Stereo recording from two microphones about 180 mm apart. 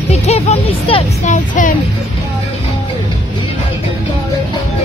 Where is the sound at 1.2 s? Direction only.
45° left (ahead or behind).